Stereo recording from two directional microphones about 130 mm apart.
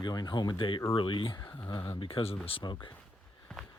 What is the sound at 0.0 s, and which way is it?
Speech, 30° left (ahead or behind).